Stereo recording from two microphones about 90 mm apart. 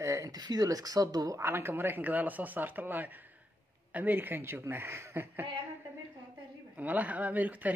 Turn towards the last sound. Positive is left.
turn(degrees=-15)  # may be behind; listen again after turning